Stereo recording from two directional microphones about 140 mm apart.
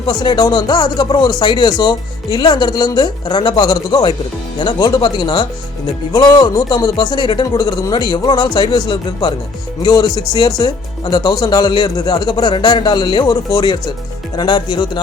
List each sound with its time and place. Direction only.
0.0 s speech: 30° left (ahead or behind)